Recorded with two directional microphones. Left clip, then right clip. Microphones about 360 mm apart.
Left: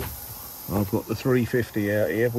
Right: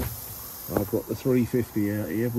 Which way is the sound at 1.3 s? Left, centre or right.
Left.